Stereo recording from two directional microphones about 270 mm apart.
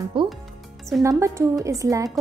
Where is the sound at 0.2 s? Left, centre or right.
Centre.